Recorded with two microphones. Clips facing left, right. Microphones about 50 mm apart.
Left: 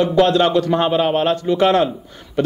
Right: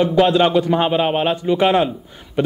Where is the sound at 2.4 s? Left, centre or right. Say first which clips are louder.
Even; centre.